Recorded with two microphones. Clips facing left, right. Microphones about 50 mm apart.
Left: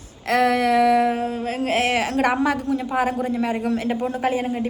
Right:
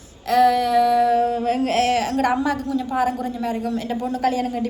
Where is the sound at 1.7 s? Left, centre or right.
Left.